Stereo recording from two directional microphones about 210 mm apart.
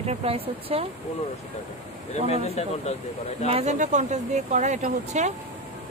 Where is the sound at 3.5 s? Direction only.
30° right (ahead or behind).